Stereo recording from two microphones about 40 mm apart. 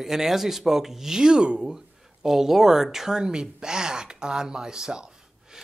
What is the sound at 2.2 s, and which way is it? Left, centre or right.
Speech, centre.